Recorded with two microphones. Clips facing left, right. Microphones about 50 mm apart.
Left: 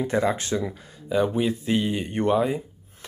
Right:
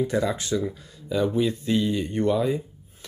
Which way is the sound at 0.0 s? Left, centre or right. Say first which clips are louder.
Left 1 dB; left.